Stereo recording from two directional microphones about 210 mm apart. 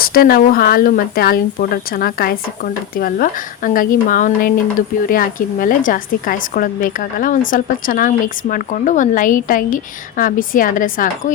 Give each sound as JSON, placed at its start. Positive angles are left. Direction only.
{"t": 0.0, "sound": "a woman's voice", "side_deg": 45}